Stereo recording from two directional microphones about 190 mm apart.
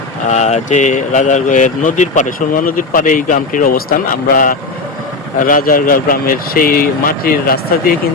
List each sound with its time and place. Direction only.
0.3 s speech: 35° left (ahead or behind)